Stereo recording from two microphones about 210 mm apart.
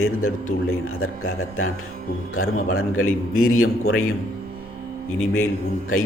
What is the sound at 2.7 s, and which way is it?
A man's voice, 85° left.